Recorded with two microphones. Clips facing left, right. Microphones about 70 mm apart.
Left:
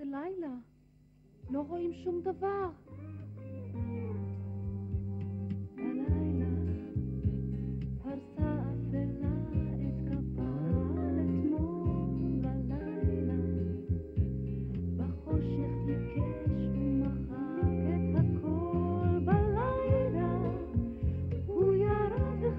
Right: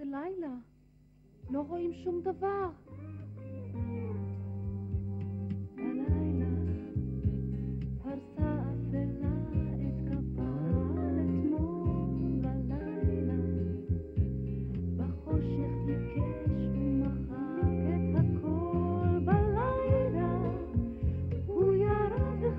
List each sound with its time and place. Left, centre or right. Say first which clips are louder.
0.0 s a sound: right 1 dB; right
1.5 s a man's voice: right 1 dB; right
3.8 s music: right 1 dB; right
5.5 s music: even; right